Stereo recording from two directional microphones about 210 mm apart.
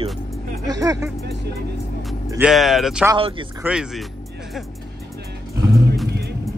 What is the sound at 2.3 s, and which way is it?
Speech, 5° right (ahead or behind).